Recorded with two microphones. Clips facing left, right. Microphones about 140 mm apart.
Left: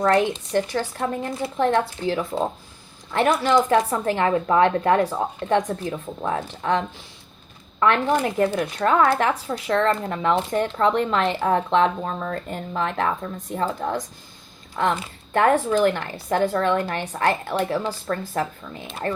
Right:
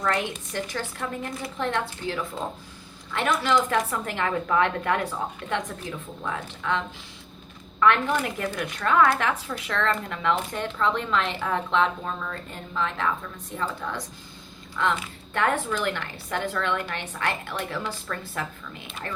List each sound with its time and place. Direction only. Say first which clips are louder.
0.0 s speech: left 8 dB; 35° left (ahead or behind)